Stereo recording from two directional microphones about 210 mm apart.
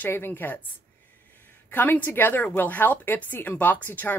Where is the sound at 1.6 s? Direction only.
10° left (ahead or behind).